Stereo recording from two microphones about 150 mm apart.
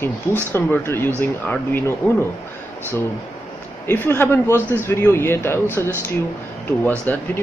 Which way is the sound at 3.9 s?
15° left (ahead or behind).